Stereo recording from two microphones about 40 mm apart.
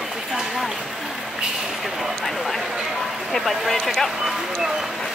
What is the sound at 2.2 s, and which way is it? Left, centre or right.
Speech, centre.